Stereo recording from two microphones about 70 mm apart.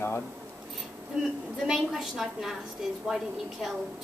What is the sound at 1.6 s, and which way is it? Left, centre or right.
Speech, centre.